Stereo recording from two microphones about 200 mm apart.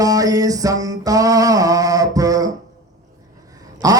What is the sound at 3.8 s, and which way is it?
Quack, 20° right (ahead or behind).